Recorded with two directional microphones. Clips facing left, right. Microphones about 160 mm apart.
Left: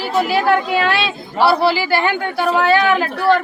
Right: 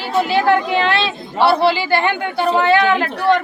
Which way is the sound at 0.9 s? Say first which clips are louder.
Right 1 dB; 5° left (ahead or behind).